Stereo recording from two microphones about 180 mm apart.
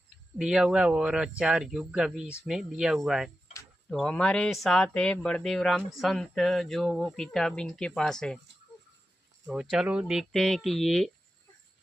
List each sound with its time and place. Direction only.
0.3 s speech: 5° right (ahead or behind)
9.5 s speech: 5° right (ahead or behind)